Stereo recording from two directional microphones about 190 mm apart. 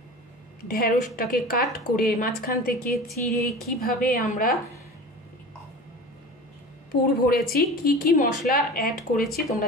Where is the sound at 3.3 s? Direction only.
55° left (ahead or behind).